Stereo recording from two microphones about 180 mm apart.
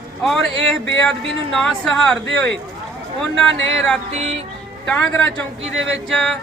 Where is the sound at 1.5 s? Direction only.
Centre (ahead or behind).